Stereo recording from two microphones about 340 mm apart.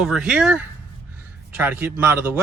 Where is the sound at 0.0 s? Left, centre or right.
Centre.